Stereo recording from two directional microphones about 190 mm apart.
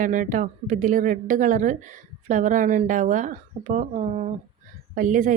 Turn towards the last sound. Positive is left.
turn(degrees=-45)  # may be behind; listen again after turning